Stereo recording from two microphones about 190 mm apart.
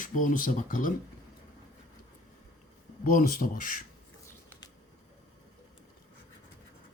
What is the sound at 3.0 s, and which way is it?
Speech, 45° left (ahead or behind).